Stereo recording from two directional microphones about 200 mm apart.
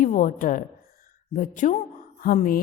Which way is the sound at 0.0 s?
40° left (ahead or behind).